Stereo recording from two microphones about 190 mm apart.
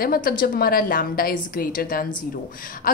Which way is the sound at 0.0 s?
50° left (ahead or behind).